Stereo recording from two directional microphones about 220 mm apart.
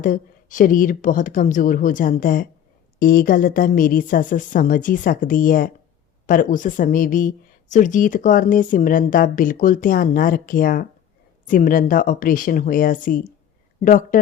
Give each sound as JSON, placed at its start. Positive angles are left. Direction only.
{"t": 0.0, "sound": "a woman's voice", "side_deg": 35}